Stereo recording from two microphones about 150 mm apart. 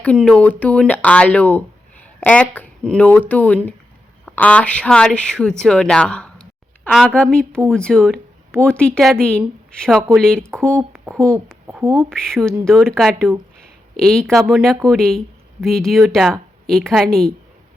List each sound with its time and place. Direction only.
0.0 s a woman's voice: 5° left (ahead or behind)
11.6 s speech: 15° right (ahead or behind)
12.0 s a woman's voice: 5° left (ahead or behind)